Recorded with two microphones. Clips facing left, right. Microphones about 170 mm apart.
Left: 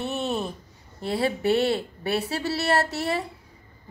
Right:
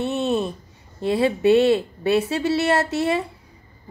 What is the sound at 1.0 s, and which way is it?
A woman's voice, 20° right (ahead or behind).